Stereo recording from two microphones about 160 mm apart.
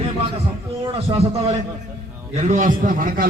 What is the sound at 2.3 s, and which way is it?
Speech, 50° right (ahead or behind).